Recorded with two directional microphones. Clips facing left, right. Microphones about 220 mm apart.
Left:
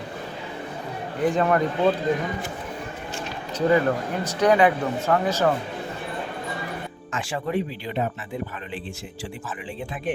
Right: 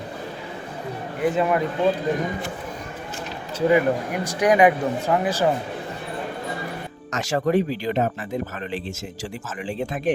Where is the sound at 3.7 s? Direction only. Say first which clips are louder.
Right 2 dB; 15° right (ahead or behind).